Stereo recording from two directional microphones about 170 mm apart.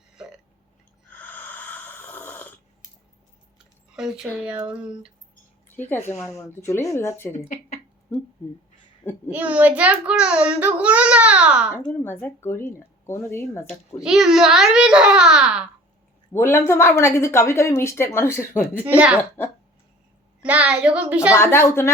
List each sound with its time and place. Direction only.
1.2 s a sound: 10° left (ahead or behind)
3.9 s speech: 5° right (ahead or behind)
5.9 s speech: 10° left (ahead or behind)
7.3 s speech: 45° left (ahead or behind)
8.1 s speech: 10° left (ahead or behind)
9.3 s speech: 10° right (ahead or behind)
11.9 s speech: 10° left (ahead or behind)
14.0 s a child's voice: centre (ahead or behind)
16.3 s speech: 15° left (ahead or behind)
18.9 s speech: 5° right (ahead or behind)
20.4 s speech: 10° right (ahead or behind)
21.3 s speech: 15° left (ahead or behind)